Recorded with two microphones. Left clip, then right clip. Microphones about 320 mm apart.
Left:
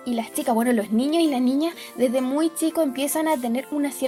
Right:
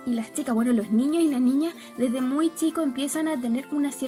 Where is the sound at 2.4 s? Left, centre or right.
Left.